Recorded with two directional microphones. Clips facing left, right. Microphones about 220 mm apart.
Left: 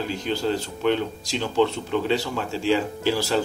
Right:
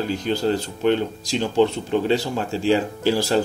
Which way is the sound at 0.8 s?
40° right (ahead or behind).